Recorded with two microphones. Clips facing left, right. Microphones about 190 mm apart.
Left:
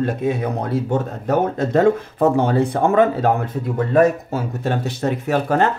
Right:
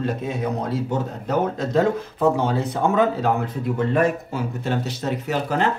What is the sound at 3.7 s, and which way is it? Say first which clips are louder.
Speech: left 5 dB; 40° left (ahead or behind).